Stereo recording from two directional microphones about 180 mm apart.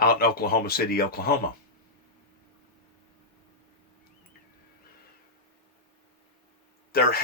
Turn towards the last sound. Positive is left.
turn(degrees=60)  # may be behind; listen again after turning